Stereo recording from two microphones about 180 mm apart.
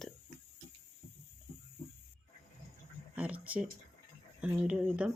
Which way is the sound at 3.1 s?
10° right (ahead or behind).